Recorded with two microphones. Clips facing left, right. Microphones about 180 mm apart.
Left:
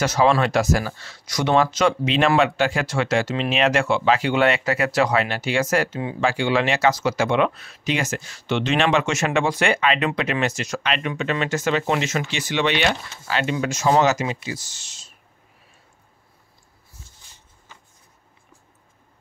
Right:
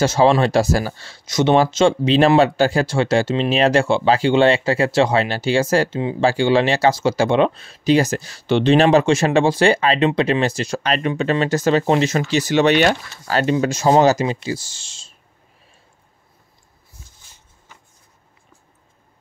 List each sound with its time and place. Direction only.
0.0 s speech: 30° right (ahead or behind)